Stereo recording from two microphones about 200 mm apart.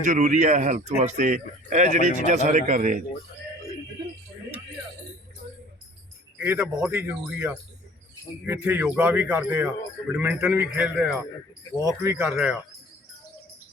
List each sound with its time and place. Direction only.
0.0 s speech: 40° right (ahead or behind)
6.4 s a man's voice: 5° right (ahead or behind)